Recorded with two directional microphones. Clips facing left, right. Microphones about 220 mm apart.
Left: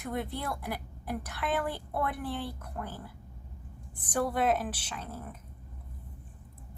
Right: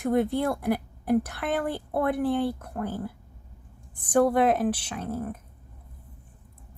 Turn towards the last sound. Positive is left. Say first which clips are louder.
# right 10 dB
turn(degrees=-55)  # may be behind; listen again after turning